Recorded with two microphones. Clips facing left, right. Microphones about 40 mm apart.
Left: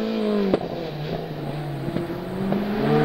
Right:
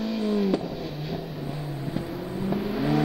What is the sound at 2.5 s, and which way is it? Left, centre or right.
Vehicle, left.